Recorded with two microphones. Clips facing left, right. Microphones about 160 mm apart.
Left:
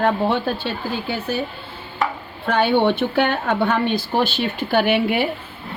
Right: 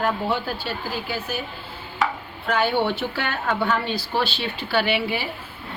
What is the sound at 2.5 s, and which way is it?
Speech, 60° left (ahead or behind).